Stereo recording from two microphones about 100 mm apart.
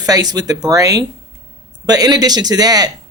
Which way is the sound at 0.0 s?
40° right (ahead or behind).